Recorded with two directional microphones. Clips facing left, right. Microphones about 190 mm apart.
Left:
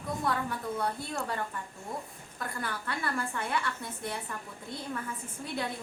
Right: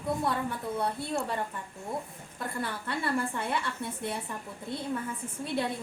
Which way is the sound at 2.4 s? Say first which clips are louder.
Right 2 dB; 25° right (ahead or behind).